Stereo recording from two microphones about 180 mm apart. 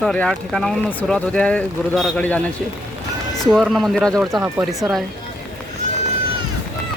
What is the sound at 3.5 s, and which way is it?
Speech, centre (ahead or behind).